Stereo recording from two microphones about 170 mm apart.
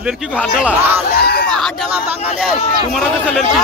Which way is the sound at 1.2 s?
65° left (ahead or behind).